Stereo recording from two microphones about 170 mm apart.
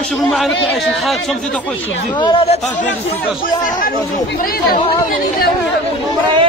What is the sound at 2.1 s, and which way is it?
Speech, 30° left (ahead or behind).